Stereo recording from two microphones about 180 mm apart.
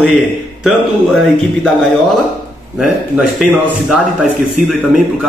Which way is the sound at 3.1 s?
5° right (ahead or behind).